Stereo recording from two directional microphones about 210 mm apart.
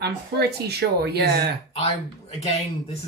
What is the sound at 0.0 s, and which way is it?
A man's voice, 50° right (ahead or behind).